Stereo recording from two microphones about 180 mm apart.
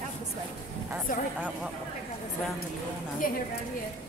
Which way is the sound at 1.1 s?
50° left (ahead or behind).